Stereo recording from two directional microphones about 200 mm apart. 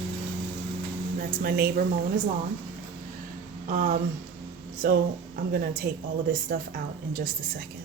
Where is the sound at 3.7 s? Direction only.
40° right (ahead or behind).